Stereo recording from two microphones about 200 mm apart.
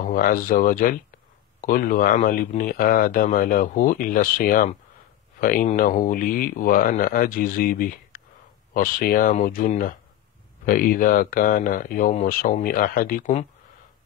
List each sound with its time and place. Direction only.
0.0 s speech: 45° left (ahead or behind)